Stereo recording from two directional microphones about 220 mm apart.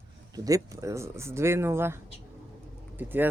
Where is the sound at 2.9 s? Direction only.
10° right (ahead or behind).